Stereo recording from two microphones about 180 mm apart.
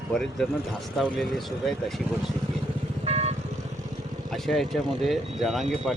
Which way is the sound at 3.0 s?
35° right (ahead or behind).